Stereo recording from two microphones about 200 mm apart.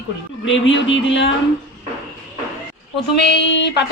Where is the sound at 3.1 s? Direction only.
60° left (ahead or behind).